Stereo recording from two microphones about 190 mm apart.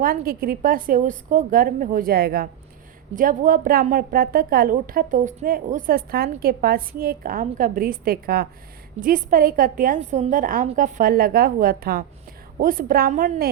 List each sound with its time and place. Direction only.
0.0 s a woman's voice: 50° right (ahead or behind)